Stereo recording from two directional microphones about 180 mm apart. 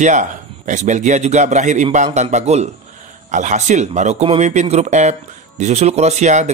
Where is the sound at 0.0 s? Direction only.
40° right (ahead or behind).